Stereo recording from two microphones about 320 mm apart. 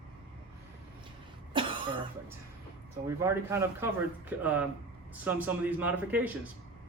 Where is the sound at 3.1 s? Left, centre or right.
Centre.